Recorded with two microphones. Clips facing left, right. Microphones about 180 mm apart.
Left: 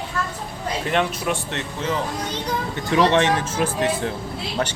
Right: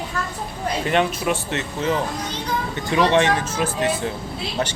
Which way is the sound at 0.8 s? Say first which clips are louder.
Right 2 dB; centre (ahead or behind).